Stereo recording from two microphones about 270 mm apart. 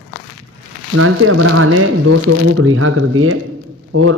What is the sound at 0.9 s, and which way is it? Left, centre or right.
A man's voice, right.